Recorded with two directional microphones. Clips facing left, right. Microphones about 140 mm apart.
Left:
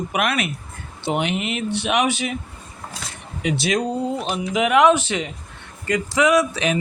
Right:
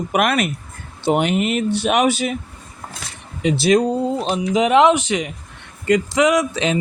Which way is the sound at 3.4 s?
35° right (ahead or behind).